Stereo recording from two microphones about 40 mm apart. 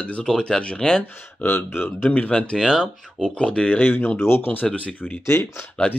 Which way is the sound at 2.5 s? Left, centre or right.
Centre.